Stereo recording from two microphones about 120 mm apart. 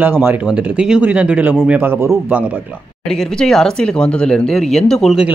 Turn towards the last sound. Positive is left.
turn(degrees=0)  # may be behind; listen again after turning